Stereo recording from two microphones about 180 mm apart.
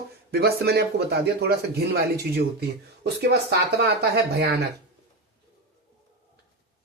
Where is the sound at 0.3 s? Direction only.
60° right (ahead or behind).